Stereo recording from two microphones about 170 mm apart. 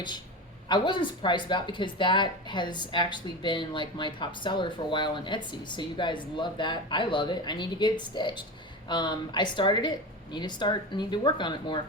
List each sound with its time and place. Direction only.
0.7 s speech: 25° left (ahead or behind)